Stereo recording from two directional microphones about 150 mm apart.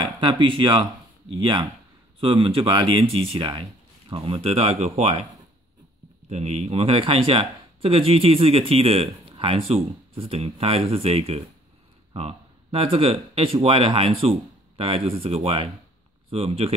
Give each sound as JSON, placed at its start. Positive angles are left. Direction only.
{"t": 0.0, "sound": "speech", "side_deg": -35}
{"t": 6.2, "sound": "speech", "side_deg": -45}